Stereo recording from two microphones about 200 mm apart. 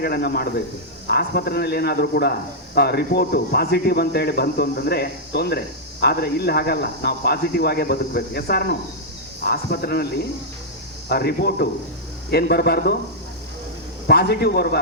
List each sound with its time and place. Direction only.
0.0 s speech: 55° left (ahead or behind)
11.1 s speech: 55° left (ahead or behind)
14.1 s speech: 55° left (ahead or behind)